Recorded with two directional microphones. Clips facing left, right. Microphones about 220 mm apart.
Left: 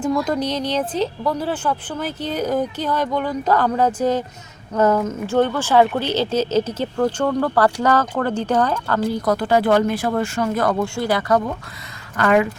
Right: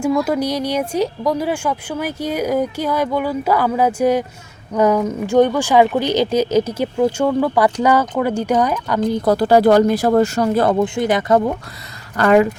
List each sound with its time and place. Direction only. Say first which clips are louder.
0.0 s speech: right 3 dB; 10° right (ahead or behind)
9.1 s speech: right 7 dB; 30° right (ahead or behind)